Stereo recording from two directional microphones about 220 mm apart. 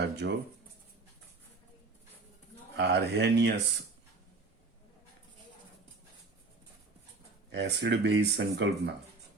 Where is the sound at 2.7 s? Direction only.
50° right (ahead or behind).